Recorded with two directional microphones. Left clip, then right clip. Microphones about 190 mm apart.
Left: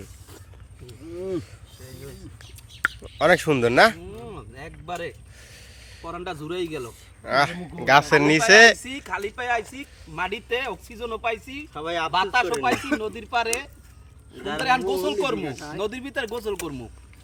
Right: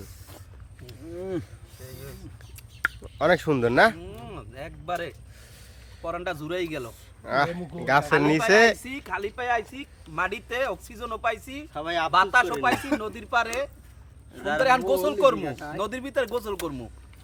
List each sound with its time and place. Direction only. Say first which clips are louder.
1.2 s a sound: left 3 dB; 5° left (ahead or behind)
1.8 s a sound: even; 20° right (ahead or behind)
3.0 s speech: left 4 dB; centre (ahead or behind)
4.0 s a sound: left 2 dB; 20° right (ahead or behind)
6.1 s speech: right 2 dB; 15° right (ahead or behind)
7.2 s speech: left 3 dB; centre (ahead or behind)
8.2 s speech: left 6 dB; 5° right (ahead or behind)
8.8 s speech: left 1 dB; 40° left (ahead or behind)
10.2 s speech: even; 10° right (ahead or behind)
11.7 s speech: even; 10° left (ahead or behind)
12.1 s speech: right 2 dB; 15° right (ahead or behind)
12.7 s speech: left 1 dB; 20° left (ahead or behind)
13.0 s speech: even; 15° right (ahead or behind)
14.6 s speech: right 1 dB; 15° right (ahead or behind)